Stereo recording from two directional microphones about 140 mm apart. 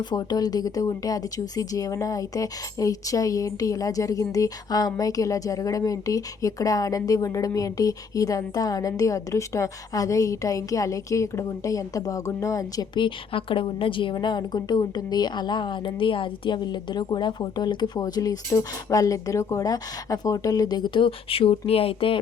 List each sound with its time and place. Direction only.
0.0 s speech: 30° left (ahead or behind)